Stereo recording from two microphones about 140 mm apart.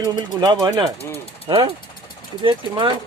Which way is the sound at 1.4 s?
40° right (ahead or behind).